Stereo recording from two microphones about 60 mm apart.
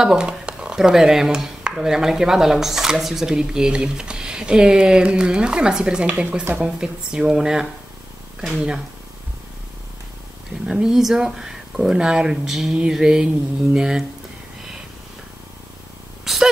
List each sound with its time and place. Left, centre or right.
0.0 s speech: centre
10.7 s speech: centre
16.3 s speech: centre